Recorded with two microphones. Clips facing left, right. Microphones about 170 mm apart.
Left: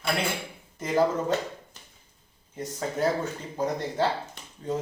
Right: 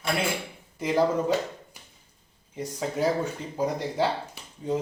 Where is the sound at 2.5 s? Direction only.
10° right (ahead or behind).